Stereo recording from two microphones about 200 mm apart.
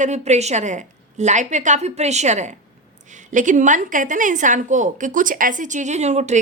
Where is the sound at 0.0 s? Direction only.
35° right (ahead or behind).